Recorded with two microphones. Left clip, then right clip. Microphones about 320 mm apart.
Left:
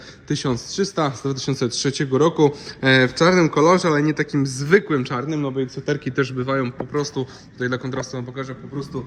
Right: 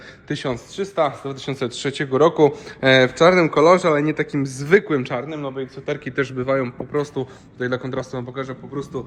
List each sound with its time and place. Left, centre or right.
0.3 s a man's voice: centre
5.3 s a man's voice: centre